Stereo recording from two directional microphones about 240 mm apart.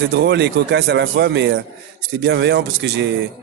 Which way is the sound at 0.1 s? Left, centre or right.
Right.